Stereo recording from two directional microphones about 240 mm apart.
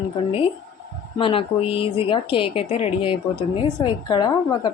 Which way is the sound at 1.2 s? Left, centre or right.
Left.